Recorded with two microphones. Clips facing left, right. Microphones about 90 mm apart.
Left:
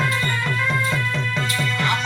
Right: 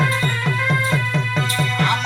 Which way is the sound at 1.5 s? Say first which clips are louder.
Right 3 dB; 45° right (ahead or behind).